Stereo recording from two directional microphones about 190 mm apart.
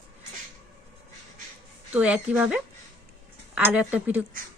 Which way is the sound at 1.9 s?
5° right (ahead or behind).